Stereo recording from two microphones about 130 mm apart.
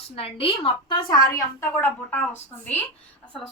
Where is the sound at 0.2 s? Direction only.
45° left (ahead or behind); by 2.3 s 15° left (ahead or behind).